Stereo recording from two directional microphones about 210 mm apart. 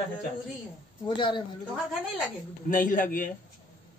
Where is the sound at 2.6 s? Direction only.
40° left (ahead or behind).